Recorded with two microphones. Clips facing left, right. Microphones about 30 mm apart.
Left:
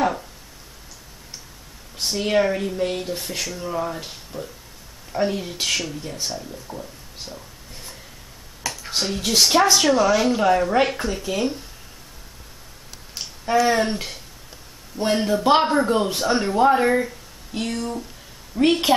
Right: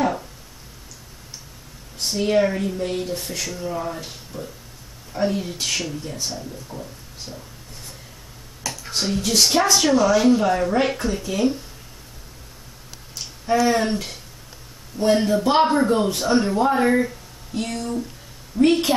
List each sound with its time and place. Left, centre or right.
0.0 s a sound: centre
2.0 s speech: centre
8.6 s finger snapping: centre
9.4 s speech: centre
13.5 s speech: centre
15.0 s speech: centre
16.8 s a sound: centre
17.6 s speech: centre